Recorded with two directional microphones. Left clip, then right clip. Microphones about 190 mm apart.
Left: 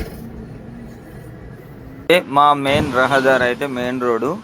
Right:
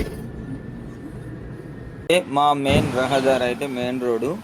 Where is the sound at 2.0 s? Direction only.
10° left (ahead or behind).